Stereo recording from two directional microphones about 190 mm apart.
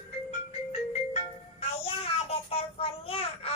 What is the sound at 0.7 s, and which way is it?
Music, 35° left (ahead or behind).